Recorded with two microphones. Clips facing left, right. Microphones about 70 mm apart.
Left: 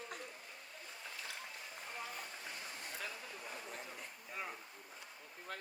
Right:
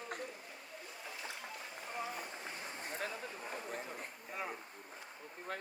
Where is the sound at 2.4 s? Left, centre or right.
Right.